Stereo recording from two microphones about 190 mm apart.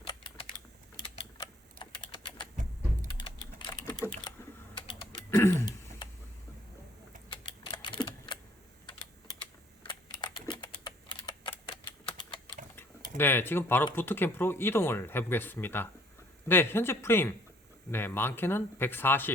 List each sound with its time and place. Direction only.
0.9 s typing: 25° left (ahead or behind)
5.3 s a sound: 15° left (ahead or behind)
7.3 s typing: 25° left (ahead or behind)
9.4 s typing: 25° left (ahead or behind)
12.7 s tick-tock: 10° left (ahead or behind)
13.9 s speech: 10° left (ahead or behind)